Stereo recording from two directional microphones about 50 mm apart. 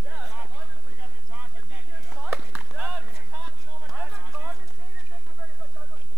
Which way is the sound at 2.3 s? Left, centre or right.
Right.